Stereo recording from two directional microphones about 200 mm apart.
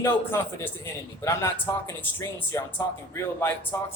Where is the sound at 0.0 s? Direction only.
10° left (ahead or behind).